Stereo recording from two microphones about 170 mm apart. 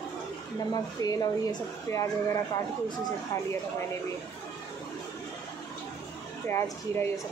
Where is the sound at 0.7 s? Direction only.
20° left (ahead or behind).